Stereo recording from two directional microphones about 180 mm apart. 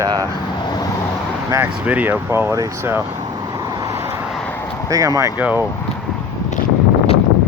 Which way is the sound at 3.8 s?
15° right (ahead or behind).